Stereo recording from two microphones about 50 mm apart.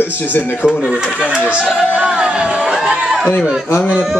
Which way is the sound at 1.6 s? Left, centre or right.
Centre.